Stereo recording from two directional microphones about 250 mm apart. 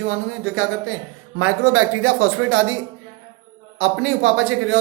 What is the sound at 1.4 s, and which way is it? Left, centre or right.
A man's voice, right.